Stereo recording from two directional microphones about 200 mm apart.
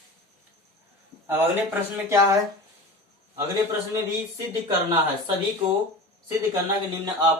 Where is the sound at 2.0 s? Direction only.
15° right (ahead or behind).